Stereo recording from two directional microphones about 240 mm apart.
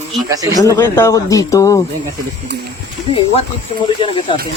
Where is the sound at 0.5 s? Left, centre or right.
Centre.